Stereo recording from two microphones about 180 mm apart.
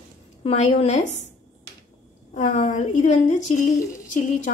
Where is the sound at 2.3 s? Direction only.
45° left (ahead or behind).